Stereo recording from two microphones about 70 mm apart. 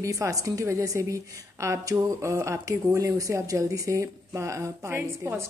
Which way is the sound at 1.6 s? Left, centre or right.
Right.